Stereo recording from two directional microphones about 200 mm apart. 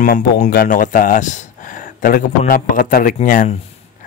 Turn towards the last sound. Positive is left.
turn(degrees=40)  # may be behind; listen again after turning